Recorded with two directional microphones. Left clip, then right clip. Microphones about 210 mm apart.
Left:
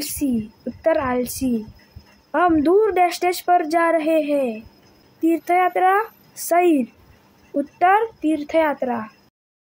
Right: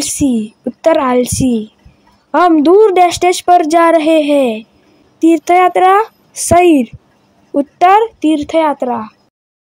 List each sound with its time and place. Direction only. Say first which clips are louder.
0.0 s speech: right 9 dB; 30° right (ahead or behind)